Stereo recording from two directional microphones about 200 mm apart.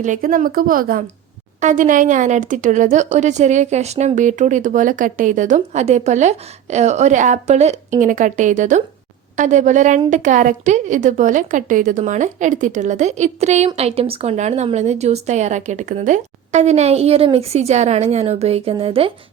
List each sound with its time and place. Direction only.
0.0 s a woman's voice: 40° right (ahead or behind)